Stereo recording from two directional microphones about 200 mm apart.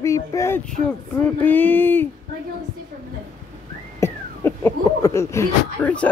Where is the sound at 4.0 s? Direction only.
10° left (ahead or behind).